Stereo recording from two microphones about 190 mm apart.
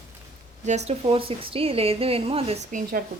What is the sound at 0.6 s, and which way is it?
A woman's voice, 35° right (ahead or behind).